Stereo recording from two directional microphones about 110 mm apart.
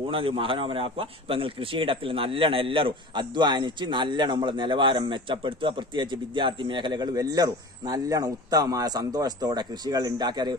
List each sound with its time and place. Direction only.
0.1 s a man's voice: 55° right (ahead or behind)